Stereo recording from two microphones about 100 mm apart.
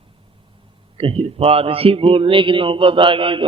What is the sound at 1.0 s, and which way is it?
A man's voice, 70° right (ahead or behind).